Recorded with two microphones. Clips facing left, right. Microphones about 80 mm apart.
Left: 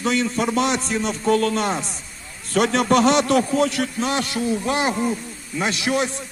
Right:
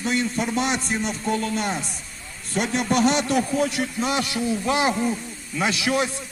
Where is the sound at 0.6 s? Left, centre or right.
Centre.